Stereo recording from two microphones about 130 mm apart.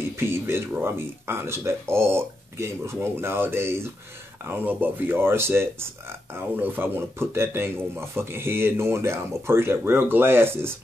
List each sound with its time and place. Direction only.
0.2 s speech: 20° right (ahead or behind)